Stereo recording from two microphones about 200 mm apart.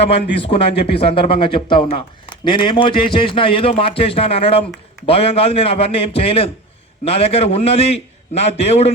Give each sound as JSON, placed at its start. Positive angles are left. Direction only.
{"t": 0.0, "sound": "a man's voice", "side_deg": 30}